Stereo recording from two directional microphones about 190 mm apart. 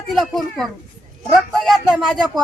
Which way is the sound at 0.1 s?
Centre (ahead or behind).